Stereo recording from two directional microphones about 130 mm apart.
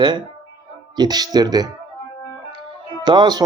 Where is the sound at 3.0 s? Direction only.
35° right (ahead or behind).